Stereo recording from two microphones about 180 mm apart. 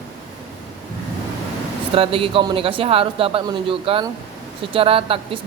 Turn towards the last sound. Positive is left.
turn(degrees=-30)  # may be behind; listen again after turning